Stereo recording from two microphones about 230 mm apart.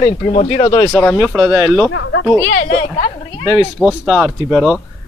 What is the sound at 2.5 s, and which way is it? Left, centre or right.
Speech, left.